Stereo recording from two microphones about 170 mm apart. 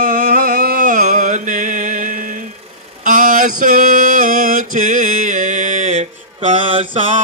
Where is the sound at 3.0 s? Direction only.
55° right (ahead or behind).